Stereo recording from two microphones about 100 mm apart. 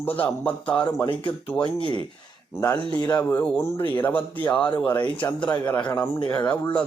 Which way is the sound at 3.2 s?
20° left (ahead or behind).